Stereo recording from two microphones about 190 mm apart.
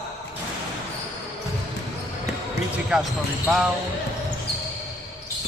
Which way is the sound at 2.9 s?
5° right (ahead or behind).